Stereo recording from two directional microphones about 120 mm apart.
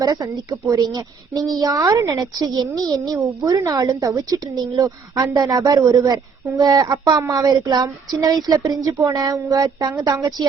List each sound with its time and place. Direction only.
0.0 s a woman's voice: 35° right (ahead or behind)